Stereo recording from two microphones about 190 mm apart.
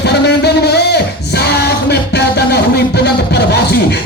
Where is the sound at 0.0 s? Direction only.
60° left (ahead or behind).